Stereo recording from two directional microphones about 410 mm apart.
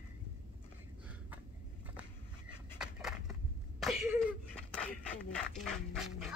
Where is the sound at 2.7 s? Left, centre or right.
Centre.